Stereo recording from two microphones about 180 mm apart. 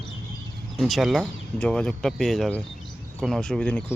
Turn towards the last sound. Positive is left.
turn(degrees=5)  # may be behind; listen again after turning